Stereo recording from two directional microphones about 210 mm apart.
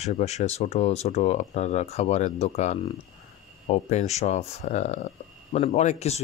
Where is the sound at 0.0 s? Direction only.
30° left (ahead or behind).